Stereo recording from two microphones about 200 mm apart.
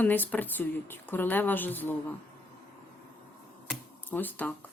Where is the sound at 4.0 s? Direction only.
10° left (ahead or behind).